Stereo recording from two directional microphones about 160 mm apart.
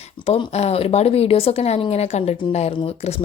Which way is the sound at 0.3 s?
40° left (ahead or behind).